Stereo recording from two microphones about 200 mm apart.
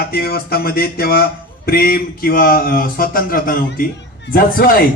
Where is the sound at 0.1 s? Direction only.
50° left (ahead or behind).